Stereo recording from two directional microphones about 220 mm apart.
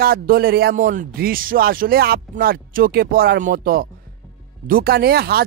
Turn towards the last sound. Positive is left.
turn(degrees=-45)  # may be behind; listen again after turning